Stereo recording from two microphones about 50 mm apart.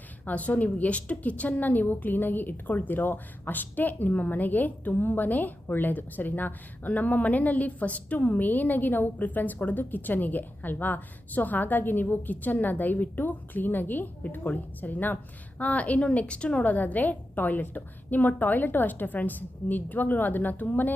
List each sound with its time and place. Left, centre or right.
0.3 s a woman's voice: left
16.6 s a woman's voice: left